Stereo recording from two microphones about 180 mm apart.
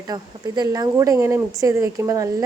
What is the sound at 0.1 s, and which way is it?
A woman's voice, 20° right (ahead or behind).